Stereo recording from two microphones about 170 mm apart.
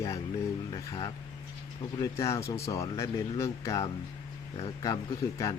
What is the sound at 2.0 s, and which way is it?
Speech, 15° left (ahead or behind).